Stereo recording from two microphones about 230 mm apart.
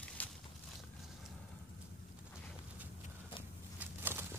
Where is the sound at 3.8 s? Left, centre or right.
Centre.